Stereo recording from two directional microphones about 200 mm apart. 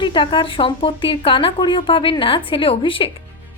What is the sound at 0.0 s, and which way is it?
A woman's voice, 25° left (ahead or behind).